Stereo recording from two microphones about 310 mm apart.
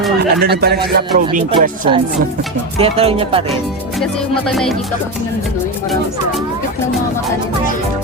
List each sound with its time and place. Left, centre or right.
0.2 s speech: right
2.7 s music: centre
4.4 s music: centre